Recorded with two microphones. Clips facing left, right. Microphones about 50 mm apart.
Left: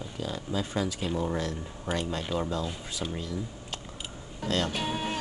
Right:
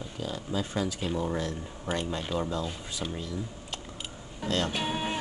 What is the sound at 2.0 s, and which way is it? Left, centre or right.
Speech, centre.